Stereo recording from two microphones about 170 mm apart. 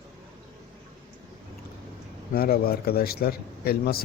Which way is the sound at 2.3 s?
60° left (ahead or behind).